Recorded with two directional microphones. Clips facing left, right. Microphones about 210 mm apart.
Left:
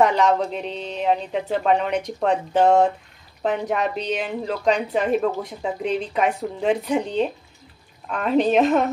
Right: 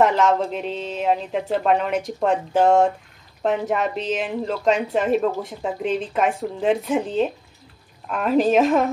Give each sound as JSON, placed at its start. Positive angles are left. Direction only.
{"t": 0.0, "sound": "a woman's voice", "side_deg": 0}